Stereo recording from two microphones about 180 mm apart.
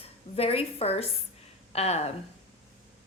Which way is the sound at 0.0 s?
35° left (ahead or behind).